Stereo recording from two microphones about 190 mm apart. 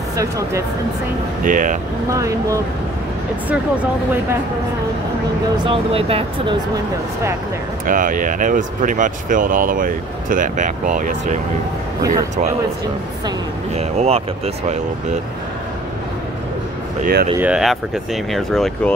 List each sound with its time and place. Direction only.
0.1 s speech: 15° right (ahead or behind)
1.4 s speech: 45° right (ahead or behind)
2.0 s speech: 15° right (ahead or behind)
5.6 s speech: 30° right (ahead or behind)
7.8 s speech: 45° right (ahead or behind)
13.7 s speech: 35° right (ahead or behind)
17.0 s speech: 55° right (ahead or behind)
17.4 s speech: 5° right (ahead or behind)